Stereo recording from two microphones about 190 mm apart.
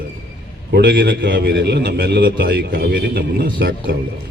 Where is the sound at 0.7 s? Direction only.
55° right (ahead or behind).